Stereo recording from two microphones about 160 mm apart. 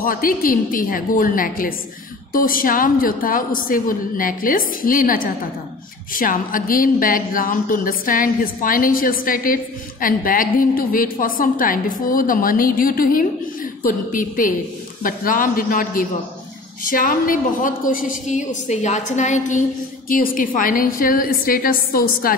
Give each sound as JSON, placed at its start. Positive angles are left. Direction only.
{"t": 0.0, "sound": "a woman's voice", "side_deg": 60}
{"t": 20.1, "sound": "speech", "side_deg": 60}